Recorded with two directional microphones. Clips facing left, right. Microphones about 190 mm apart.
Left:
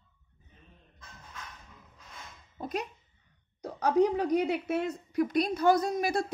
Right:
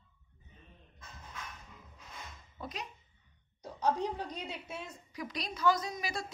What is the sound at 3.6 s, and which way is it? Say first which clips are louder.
A woman's voice: left 8 dB; 75° left (ahead or behind).